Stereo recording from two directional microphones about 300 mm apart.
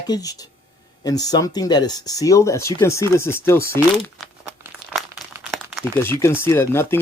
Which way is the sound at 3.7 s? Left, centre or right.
Centre.